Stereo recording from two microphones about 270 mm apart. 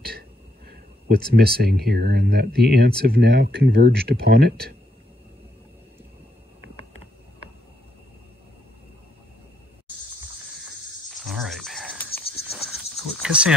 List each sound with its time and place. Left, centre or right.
1.0 s speech: right
10.6 s insect: centre